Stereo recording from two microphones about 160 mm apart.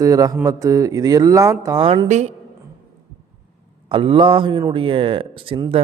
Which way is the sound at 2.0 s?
45° right (ahead or behind).